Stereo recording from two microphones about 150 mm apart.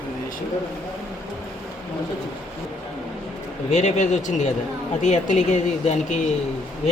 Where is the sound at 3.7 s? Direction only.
55° left (ahead or behind).